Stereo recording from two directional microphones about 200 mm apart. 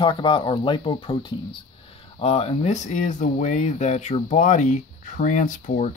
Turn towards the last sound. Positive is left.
turn(degrees=40)  # may be behind; listen again after turning